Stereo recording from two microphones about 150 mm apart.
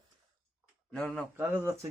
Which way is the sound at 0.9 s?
5° left (ahead or behind).